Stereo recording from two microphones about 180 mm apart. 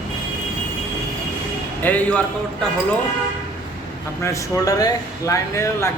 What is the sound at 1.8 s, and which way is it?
Speech, 10° left (ahead or behind).